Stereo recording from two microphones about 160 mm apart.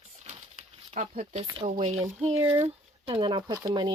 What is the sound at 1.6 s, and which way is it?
Speech, 40° right (ahead or behind).